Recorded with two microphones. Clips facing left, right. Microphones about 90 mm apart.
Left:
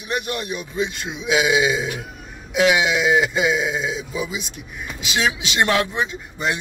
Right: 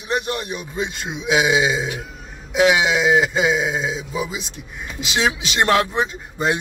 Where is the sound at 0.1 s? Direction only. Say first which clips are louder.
Right 2 dB; 30° right (ahead or behind).